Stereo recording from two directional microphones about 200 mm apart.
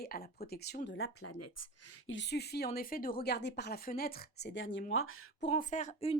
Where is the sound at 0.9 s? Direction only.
90° left.